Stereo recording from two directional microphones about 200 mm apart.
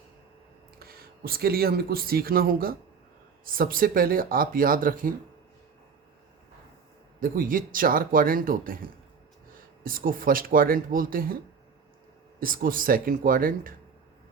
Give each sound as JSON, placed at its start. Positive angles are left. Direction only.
{"t": 0.8, "sound": "speech", "side_deg": -50}
{"t": 7.2, "sound": "speech", "side_deg": -45}
{"t": 12.4, "sound": "speech", "side_deg": -45}